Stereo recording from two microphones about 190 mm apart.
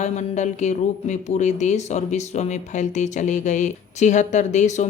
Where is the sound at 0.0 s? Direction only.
40° left (ahead or behind).